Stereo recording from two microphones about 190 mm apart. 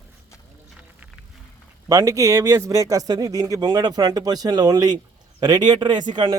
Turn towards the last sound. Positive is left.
turn(degrees=-25)  # may be behind; listen again after turning